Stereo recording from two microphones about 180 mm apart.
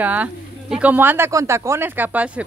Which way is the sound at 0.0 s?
10° right (ahead or behind).